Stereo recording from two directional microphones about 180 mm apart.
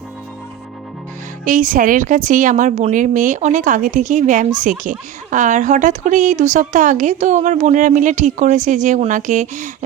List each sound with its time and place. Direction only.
1.5 s a woman's voice: 45° right (ahead or behind)